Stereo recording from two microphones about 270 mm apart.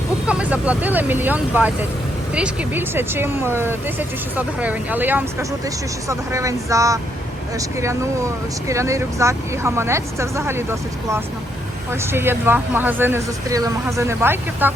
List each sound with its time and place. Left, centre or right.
0.3 s speech: centre